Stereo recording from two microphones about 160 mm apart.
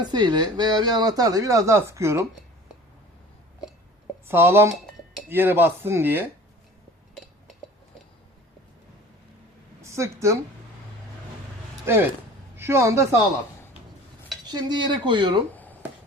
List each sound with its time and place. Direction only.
0.0 s speech: 25° right (ahead or behind)
4.3 s speech: 15° right (ahead or behind)
9.8 s a woman's voice: 20° right (ahead or behind)
11.9 s a man's voice: 15° right (ahead or behind)
14.5 s speech: 30° right (ahead or behind)
15.5 s a sound: 10° left (ahead or behind)